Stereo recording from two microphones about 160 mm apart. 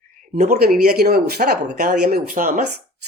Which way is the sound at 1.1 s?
75° right (ahead or behind).